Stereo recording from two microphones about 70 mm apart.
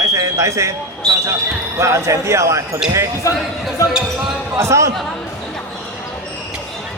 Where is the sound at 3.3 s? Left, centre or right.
Left.